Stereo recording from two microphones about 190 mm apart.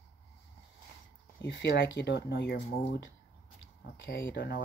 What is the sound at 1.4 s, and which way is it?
Speech, 65° left (ahead or behind).